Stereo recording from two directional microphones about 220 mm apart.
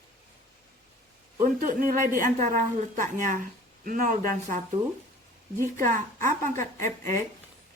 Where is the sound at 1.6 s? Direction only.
40° right (ahead or behind).